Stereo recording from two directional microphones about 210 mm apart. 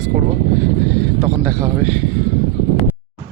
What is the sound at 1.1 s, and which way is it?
Speech, 15° right (ahead or behind).